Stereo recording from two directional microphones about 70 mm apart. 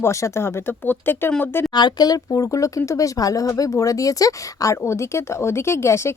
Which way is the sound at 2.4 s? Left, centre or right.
Left.